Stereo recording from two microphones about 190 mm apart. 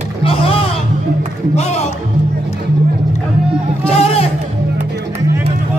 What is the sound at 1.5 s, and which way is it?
Music, 35° left (ahead or behind).